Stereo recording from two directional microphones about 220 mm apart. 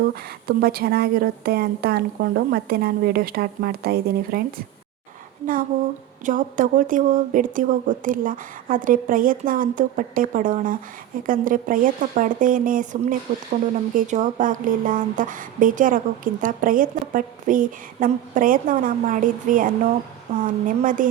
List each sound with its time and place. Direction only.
0.0 s a woman's voice: 40° right (ahead or behind)
6.2 s speech: 35° right (ahead or behind)